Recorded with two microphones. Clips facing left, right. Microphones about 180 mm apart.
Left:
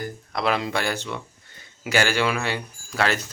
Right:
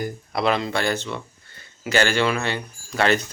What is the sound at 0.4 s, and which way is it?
Speech, 10° left (ahead or behind).